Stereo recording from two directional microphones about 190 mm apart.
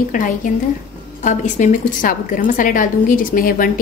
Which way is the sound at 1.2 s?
40° left (ahead or behind).